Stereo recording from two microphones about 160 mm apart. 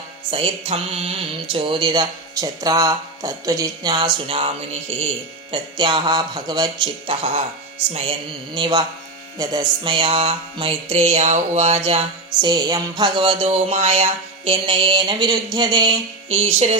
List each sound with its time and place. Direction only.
0.3 s music: 35° right (ahead or behind)
1.5 s speech: 30° right (ahead or behind)
8.5 s music: 30° right (ahead or behind)
12.4 s music: 25° right (ahead or behind)